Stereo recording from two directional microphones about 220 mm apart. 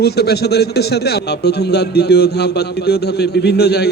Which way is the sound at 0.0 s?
45° left (ahead or behind).